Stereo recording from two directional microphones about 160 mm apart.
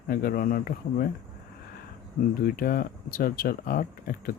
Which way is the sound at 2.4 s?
70° left (ahead or behind).